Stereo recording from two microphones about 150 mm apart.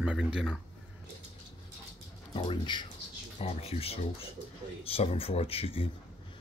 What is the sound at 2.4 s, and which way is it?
Speech, 35° left (ahead or behind).